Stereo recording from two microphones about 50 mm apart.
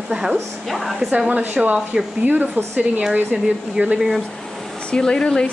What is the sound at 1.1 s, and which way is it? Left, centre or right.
Speech, right.